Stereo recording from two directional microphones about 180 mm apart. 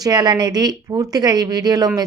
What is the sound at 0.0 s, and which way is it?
A woman's voice, 25° right (ahead or behind).